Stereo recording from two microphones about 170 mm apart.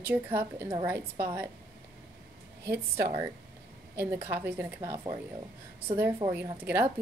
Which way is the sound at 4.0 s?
15° right (ahead or behind).